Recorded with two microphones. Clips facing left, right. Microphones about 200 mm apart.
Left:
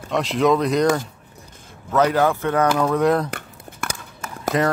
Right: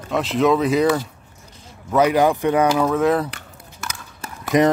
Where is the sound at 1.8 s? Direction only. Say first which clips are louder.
Right 2 dB; 10° right (ahead or behind).